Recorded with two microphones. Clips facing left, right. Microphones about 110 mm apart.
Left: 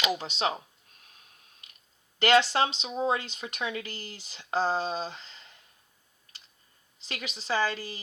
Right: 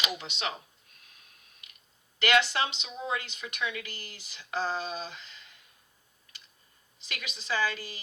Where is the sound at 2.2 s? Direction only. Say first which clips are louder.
Left 4 dB; 35° left (ahead or behind).